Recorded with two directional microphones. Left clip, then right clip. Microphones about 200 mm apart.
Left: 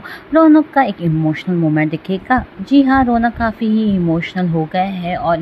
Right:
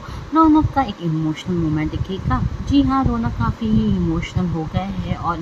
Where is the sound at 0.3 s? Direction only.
15° left (ahead or behind).